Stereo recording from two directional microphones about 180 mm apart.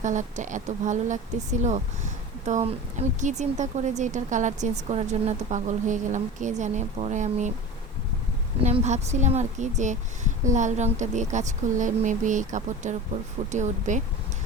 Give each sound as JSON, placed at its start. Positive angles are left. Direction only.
{"t": 0.0, "sound": "a woman's voice", "side_deg": -45}
{"t": 8.6, "sound": "a woman's voice", "side_deg": -40}